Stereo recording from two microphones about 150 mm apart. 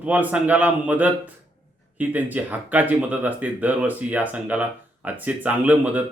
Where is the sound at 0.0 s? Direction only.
10° right (ahead or behind).